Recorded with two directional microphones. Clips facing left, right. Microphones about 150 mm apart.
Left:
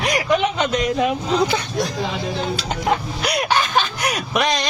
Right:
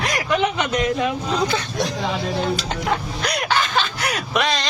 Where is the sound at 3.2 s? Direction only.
15° left (ahead or behind).